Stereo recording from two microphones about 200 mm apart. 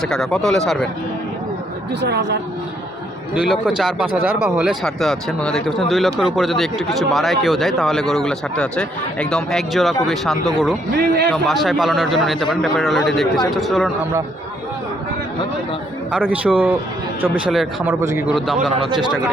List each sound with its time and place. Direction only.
0.0 s speech: 5° left (ahead or behind)
2.0 s speech: 60° right (ahead or behind)
3.3 s speech: 5° right (ahead or behind)
10.3 s speech: 20° right (ahead or behind)
10.9 s speech: 55° right (ahead or behind)
11.4 s speech: centre (ahead or behind)
16.1 s speech: 5° right (ahead or behind)